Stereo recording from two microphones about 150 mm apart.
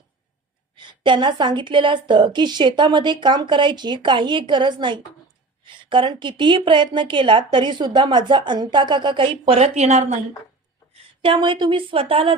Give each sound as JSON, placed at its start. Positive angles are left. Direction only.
{"t": 0.8, "sound": "a woman's voice", "side_deg": -30}
{"t": 11.2, "sound": "a woman's voice", "side_deg": -35}